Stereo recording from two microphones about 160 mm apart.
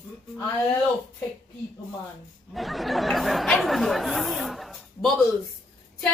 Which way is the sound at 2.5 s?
Centre (ahead or behind).